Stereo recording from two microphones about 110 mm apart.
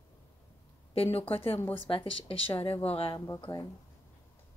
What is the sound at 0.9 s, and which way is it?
Speech, 60° left (ahead or behind).